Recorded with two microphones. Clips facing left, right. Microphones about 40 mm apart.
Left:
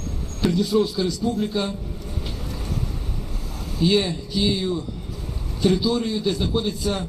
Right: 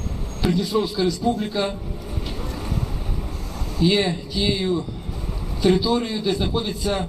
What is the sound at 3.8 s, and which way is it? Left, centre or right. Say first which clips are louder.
Speech: even; right.